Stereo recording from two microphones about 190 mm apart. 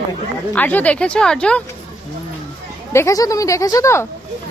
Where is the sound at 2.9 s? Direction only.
15° left (ahead or behind).